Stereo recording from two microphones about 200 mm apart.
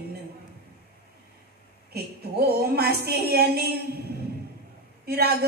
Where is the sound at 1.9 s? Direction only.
50° right (ahead or behind).